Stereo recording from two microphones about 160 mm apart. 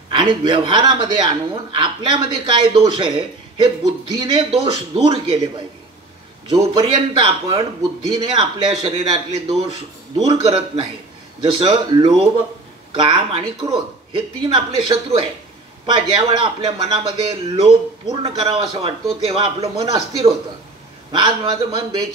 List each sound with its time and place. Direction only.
0.1 s speech: 30° right (ahead or behind)
6.6 s speech: 35° right (ahead or behind)
21.1 s speech: 30° right (ahead or behind)